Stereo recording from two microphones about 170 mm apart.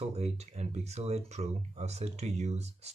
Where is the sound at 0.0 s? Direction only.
40° right (ahead or behind).